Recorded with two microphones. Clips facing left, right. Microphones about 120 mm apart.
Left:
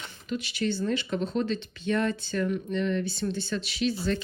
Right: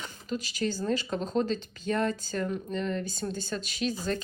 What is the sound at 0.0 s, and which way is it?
Speech, 40° right (ahead or behind).